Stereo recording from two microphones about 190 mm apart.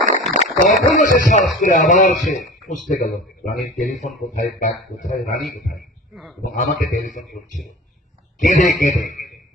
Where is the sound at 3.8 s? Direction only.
40° left (ahead or behind).